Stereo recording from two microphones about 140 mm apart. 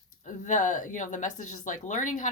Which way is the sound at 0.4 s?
65° left (ahead or behind).